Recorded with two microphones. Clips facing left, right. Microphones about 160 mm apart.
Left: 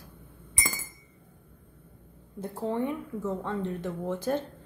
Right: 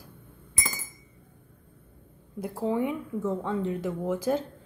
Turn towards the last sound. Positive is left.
turn(degrees=-5)  # may be behind; listen again after turning